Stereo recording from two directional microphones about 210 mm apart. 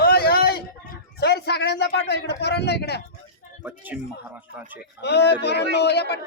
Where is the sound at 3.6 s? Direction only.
10° right (ahead or behind).